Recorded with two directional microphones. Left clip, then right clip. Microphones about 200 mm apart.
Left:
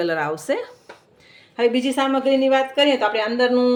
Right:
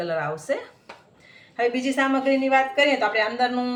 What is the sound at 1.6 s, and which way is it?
Speech, 40° left (ahead or behind).